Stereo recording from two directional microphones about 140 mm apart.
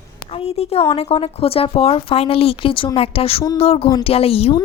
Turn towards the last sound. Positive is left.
turn(degrees=40)  # may be behind; listen again after turning